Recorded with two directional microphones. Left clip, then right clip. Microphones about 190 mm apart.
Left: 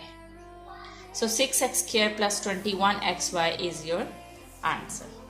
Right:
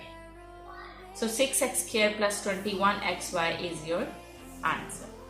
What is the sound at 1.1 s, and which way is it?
A woman's voice, 50° left (ahead or behind).